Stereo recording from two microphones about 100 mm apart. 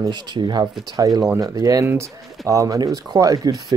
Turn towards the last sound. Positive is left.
turn(degrees=-40)  # may be behind; listen again after turning